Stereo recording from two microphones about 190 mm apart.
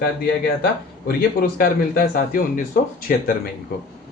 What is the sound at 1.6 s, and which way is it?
Speech, 45° left (ahead or behind).